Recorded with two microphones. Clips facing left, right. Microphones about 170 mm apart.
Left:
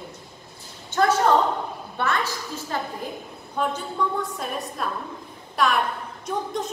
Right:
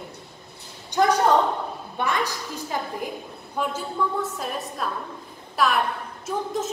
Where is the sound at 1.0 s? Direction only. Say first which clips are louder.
Even; 15° right (ahead or behind).